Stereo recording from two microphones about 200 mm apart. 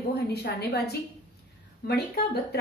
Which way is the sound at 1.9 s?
55° left (ahead or behind).